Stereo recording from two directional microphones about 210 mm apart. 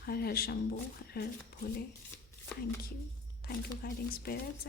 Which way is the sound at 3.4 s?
45° left (ahead or behind).